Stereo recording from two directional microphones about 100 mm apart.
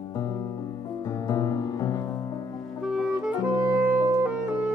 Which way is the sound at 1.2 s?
35° left (ahead or behind).